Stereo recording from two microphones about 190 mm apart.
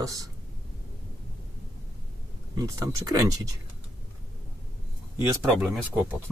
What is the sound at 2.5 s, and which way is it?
Speech, 20° right (ahead or behind).